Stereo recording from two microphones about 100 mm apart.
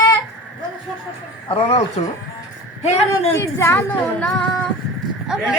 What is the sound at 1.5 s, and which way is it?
Speech, 60° left (ahead or behind).